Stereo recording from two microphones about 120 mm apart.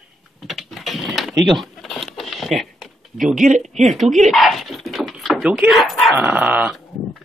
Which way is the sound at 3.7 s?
75° right (ahead or behind).